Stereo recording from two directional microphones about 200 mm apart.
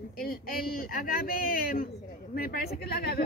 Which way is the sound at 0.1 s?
50° left (ahead or behind).